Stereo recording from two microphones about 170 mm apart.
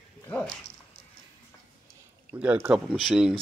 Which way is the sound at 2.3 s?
10° right (ahead or behind).